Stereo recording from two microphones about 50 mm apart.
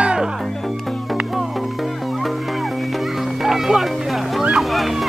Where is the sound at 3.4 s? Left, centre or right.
Centre.